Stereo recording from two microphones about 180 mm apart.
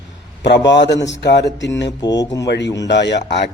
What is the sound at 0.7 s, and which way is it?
Speech, 75° left (ahead or behind).